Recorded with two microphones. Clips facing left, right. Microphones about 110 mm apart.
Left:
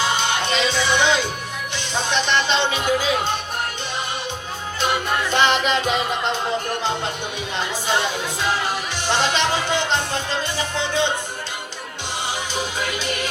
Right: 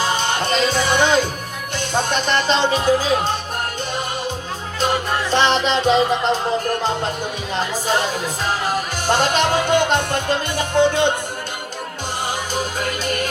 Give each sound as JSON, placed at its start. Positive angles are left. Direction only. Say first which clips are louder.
{"t": 0.0, "sound": "music", "louder": "right 1 dB", "side_deg": -40}
{"t": 1.7, "sound": "speech", "louder": "right 3 dB", "side_deg": -45}
{"t": 4.8, "sound": "speech", "louder": "right 2 dB", "side_deg": -35}
{"t": 7.5, "sound": "music", "louder": "right 2 dB", "side_deg": -40}
{"t": 12.5, "sound": "music", "louder": "right 2 dB", "side_deg": -45}